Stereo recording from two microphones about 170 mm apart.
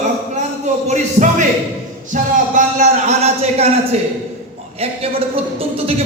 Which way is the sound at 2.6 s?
50° right (ahead or behind).